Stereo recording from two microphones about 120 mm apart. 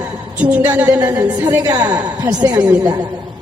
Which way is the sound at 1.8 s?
15° right (ahead or behind).